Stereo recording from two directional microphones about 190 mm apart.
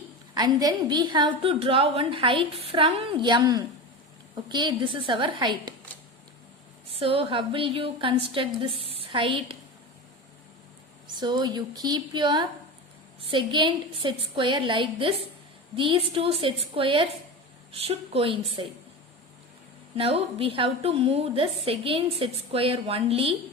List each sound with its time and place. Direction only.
0.3 s a woman's voice: 20° right (ahead or behind)
6.9 s a woman's voice: 30° right (ahead or behind)
11.2 s a woman's voice: 20° right (ahead or behind)
20.0 s a woman's voice: 30° right (ahead or behind)